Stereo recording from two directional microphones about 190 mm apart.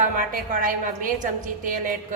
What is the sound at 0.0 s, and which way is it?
A woman's voice, 45° right (ahead or behind).